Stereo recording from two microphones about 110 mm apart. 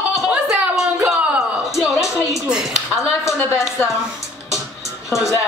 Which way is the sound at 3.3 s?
25° left (ahead or behind).